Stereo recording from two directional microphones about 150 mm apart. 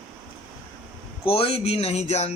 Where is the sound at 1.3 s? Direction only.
40° left (ahead or behind).